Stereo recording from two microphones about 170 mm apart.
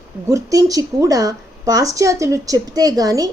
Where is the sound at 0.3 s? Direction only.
20° right (ahead or behind).